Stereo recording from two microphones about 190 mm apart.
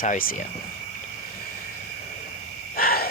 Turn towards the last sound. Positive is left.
turn(degrees=50)  # may be behind; listen again after turning